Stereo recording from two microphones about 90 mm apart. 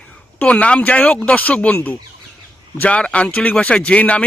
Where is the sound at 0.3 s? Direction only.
15° left (ahead or behind).